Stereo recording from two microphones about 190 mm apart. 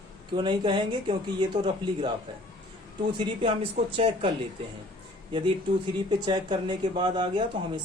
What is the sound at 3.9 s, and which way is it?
Speech, 30° right (ahead or behind).